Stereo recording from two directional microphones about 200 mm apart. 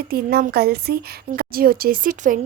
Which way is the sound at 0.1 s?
50° right (ahead or behind).